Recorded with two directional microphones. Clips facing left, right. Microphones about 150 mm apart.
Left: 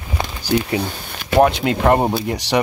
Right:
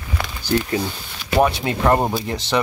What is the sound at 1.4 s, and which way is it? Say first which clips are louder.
Speech: left 2 dB; 20° left (ahead or behind).